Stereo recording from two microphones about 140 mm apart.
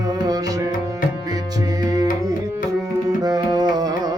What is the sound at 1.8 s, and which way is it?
Music, 25° right (ahead or behind).